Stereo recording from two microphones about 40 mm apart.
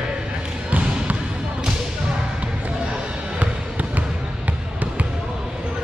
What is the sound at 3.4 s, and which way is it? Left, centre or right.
Trickle, right.